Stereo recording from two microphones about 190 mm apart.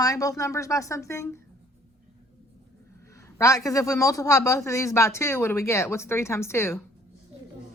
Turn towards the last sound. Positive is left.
turn(degrees=15)  # may be behind; listen again after turning